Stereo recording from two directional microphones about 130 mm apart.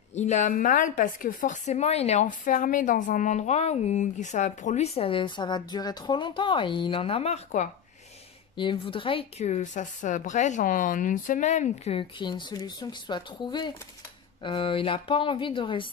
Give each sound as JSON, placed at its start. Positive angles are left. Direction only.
{"t": 0.1, "sound": "a woman's voice", "side_deg": 70}
{"t": 8.5, "sound": "speech", "side_deg": 40}
{"t": 9.4, "sound": "speech", "side_deg": 65}